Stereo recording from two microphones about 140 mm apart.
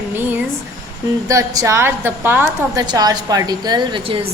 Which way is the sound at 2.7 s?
30° right (ahead or behind).